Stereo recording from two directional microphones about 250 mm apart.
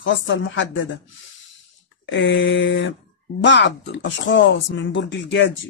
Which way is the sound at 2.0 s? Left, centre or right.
Left.